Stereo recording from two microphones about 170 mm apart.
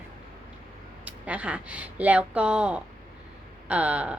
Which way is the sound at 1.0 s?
10° right (ahead or behind).